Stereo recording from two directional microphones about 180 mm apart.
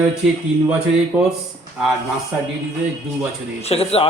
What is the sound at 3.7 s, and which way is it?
Speech, 35° left (ahead or behind).